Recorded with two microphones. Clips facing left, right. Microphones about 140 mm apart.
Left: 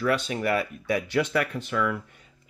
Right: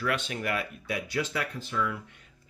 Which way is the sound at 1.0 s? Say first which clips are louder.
Left 5 dB; 65° left (ahead or behind).